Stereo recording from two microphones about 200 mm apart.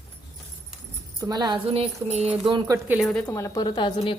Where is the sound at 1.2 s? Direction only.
20° right (ahead or behind).